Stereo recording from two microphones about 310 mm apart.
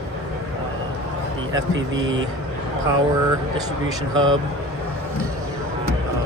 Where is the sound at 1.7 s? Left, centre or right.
Right.